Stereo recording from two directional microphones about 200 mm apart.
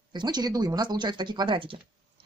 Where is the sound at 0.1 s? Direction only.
20° right (ahead or behind).